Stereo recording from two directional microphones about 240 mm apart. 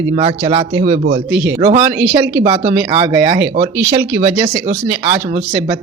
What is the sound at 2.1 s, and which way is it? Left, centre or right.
Speech, centre.